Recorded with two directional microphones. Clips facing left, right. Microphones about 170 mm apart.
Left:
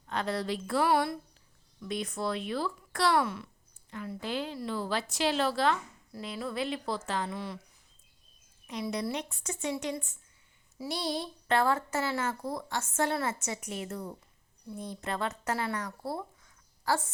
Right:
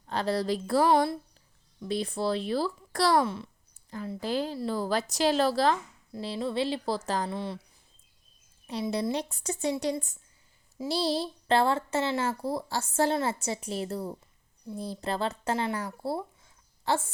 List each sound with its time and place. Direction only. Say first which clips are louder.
0.1 s a woman's voice: right 4 dB; 35° right (ahead or behind)
8.6 s a woman's voice: right 4 dB; 30° right (ahead or behind)